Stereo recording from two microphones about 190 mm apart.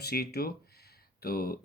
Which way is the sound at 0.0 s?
55° left (ahead or behind).